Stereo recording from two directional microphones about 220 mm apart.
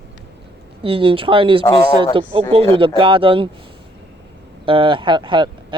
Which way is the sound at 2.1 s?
25° right (ahead or behind).